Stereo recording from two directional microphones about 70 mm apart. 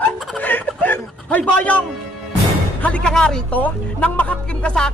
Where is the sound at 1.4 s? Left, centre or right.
Centre.